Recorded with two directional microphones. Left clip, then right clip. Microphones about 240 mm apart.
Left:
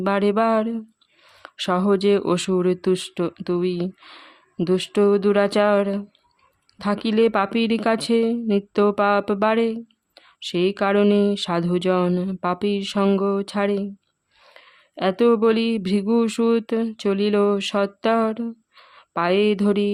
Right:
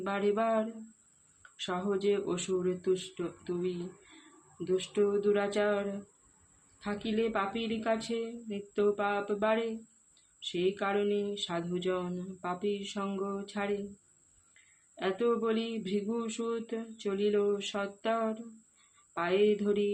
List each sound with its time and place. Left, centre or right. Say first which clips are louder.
0.0 s speech: left 11 dB; left